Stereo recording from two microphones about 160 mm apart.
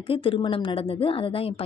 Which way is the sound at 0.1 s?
35° left (ahead or behind).